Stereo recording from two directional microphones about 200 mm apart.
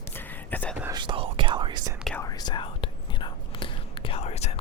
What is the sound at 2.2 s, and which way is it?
Whispering, 20° left (ahead or behind).